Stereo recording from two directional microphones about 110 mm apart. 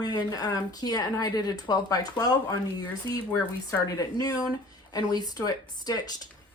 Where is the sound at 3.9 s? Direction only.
35° left (ahead or behind).